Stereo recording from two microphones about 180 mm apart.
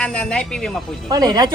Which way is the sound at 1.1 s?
20° right (ahead or behind).